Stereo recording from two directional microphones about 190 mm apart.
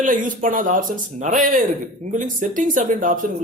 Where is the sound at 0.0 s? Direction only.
45° right (ahead or behind).